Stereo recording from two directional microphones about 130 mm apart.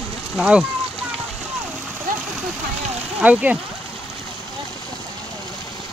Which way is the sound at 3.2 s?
10° right (ahead or behind).